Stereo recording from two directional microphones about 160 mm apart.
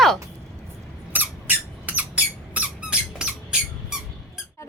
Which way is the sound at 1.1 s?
10° right (ahead or behind).